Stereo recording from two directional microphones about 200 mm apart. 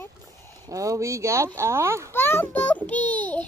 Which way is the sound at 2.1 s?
10° left (ahead or behind).